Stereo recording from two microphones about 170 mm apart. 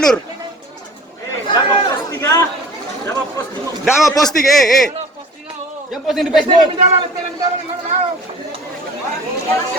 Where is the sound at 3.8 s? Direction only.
5° right (ahead or behind).